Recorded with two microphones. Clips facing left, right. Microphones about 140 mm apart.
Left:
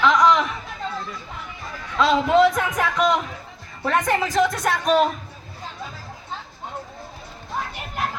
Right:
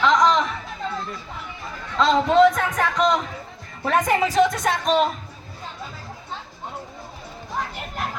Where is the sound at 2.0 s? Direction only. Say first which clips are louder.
Right 1 dB; 10° left (ahead or behind).